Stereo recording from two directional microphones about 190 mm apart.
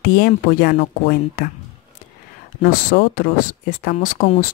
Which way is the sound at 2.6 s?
50° left (ahead or behind).